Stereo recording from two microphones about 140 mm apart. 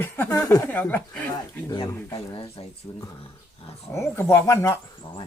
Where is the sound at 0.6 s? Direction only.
10° left (ahead or behind).